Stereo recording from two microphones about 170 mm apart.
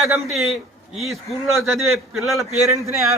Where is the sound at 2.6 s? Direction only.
15° right (ahead or behind).